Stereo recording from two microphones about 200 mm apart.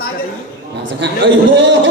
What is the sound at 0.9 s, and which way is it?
A man's voice, 60° right (ahead or behind).